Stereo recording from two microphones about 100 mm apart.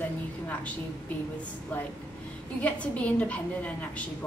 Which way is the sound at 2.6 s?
15° left (ahead or behind).